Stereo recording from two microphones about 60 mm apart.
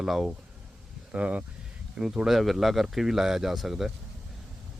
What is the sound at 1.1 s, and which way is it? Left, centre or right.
Speech, right.